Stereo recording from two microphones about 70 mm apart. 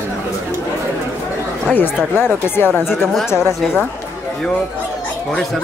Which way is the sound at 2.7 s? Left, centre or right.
Centre.